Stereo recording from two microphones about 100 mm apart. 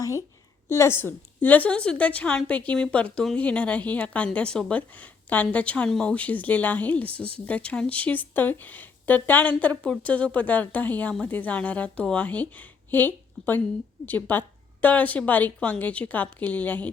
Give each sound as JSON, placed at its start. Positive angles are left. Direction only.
{"t": 0.7, "sound": "a woman's voice", "side_deg": 25}